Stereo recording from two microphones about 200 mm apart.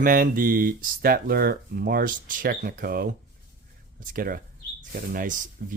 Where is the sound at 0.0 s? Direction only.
45° right (ahead or behind).